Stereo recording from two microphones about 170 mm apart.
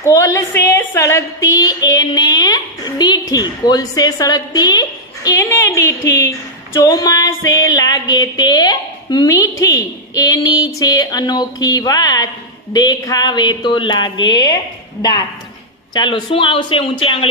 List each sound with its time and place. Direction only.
0.0 s a woman's voice: 20° left (ahead or behind)
6.1 s a sound: 15° left (ahead or behind)
9.4 s a woman's voice: 20° left (ahead or behind)